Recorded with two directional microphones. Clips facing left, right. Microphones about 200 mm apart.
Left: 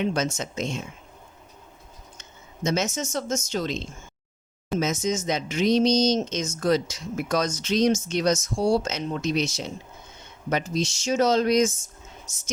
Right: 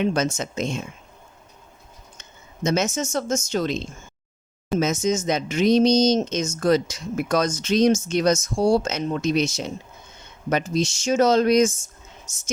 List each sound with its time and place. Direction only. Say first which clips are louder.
0.0 s speech: right 3 dB; 50° right (ahead or behind)
2.6 s speech: right 3 dB; 50° right (ahead or behind)
4.8 s speech: right 4 dB; 50° right (ahead or behind)